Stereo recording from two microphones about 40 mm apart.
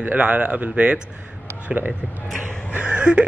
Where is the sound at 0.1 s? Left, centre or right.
Right.